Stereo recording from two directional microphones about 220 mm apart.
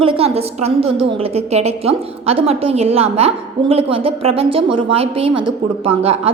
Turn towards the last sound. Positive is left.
turn(degrees=-25)  # may be behind; listen again after turning